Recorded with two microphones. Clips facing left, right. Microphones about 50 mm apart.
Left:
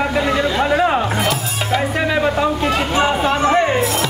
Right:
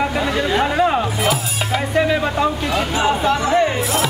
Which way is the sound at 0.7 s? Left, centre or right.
Centre.